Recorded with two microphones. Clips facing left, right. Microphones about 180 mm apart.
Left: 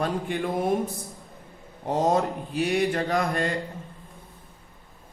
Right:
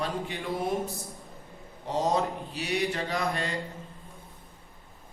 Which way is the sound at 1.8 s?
50° left (ahead or behind).